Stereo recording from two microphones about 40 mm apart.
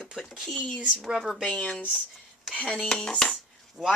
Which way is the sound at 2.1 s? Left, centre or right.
Centre.